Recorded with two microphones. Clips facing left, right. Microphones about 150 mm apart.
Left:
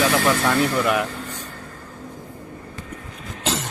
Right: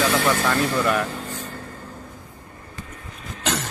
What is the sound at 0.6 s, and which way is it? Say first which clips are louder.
Speech: left 1 dB; 15° left (ahead or behind).